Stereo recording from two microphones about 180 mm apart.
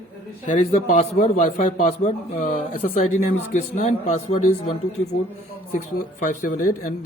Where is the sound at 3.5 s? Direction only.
45° left (ahead or behind).